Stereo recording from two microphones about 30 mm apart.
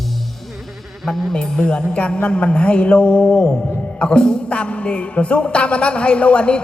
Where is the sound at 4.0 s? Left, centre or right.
Left.